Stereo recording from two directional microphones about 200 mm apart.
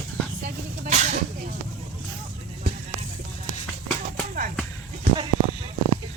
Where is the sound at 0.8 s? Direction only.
35° right (ahead or behind).